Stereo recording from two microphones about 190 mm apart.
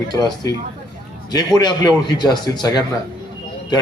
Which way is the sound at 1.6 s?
20° left (ahead or behind).